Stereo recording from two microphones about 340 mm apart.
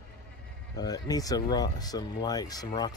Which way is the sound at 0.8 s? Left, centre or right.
Centre.